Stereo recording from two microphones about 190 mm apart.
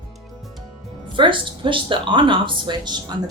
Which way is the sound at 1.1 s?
25° right (ahead or behind).